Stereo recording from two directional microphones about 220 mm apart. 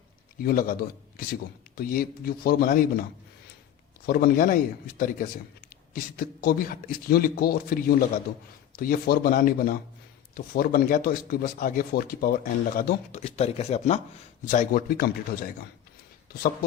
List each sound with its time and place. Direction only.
0.4 s a man's voice: 40° left (ahead or behind)
4.0 s a man's voice: 45° left (ahead or behind)